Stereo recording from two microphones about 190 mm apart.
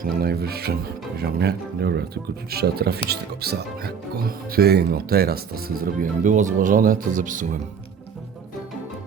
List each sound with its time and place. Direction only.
0.0 s speech: 55° right (ahead or behind)